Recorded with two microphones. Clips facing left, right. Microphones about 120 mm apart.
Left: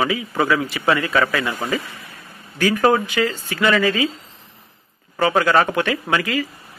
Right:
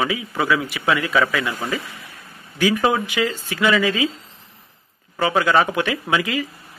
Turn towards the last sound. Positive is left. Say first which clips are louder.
# left 1 dB
turn(degrees=-15)  # may be behind; listen again after turning